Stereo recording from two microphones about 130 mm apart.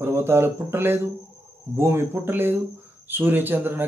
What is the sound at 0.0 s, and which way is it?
Speech, 20° right (ahead or behind).